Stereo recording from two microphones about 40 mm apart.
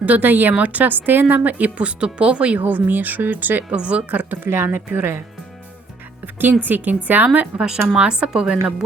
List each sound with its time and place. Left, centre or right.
0.0 s a woman's voice: right
2.6 s speech: right
3.8 s a woman's voice: right
4.4 s speech: right
6.2 s speech: right
7.5 s speech: right